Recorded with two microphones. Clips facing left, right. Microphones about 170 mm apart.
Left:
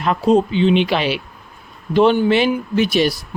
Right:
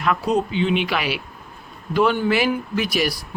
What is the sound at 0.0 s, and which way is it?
Speech, 30° left (ahead or behind).